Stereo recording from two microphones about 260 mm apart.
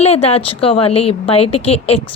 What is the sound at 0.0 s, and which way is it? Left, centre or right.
A woman's voice, left.